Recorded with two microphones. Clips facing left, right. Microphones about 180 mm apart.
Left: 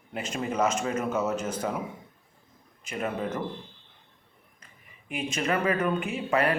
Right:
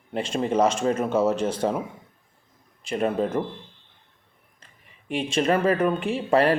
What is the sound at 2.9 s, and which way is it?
Speech, 30° right (ahead or behind).